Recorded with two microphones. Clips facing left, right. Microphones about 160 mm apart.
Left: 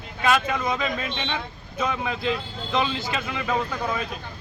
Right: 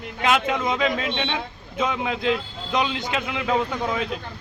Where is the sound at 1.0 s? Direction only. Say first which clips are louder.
Right 4 dB; 90° right.